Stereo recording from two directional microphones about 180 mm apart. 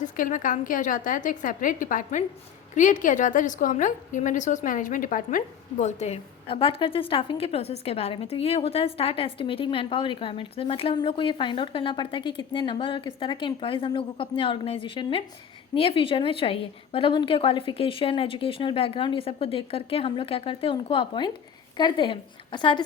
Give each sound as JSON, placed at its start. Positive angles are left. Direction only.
{"t": 0.0, "sound": "a woman's voice", "side_deg": 45}